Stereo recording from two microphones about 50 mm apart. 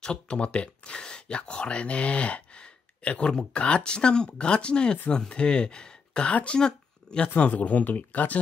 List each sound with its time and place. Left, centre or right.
0.0 s speech: centre